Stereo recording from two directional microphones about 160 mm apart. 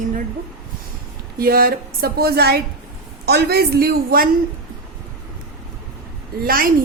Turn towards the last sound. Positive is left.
turn(degrees=-65)  # may be behind; listen again after turning